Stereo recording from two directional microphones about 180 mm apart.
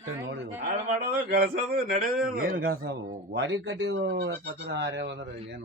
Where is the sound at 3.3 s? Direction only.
90° right; by 5.6 s 70° right (ahead or behind).